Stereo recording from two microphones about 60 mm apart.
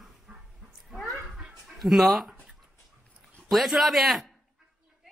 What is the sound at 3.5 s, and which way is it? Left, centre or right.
Speech, centre.